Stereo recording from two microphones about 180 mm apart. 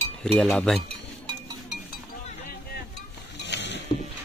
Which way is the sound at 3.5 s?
75° left (ahead or behind).